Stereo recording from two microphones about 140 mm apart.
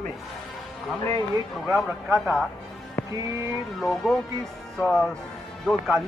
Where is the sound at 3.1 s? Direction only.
20° right (ahead or behind).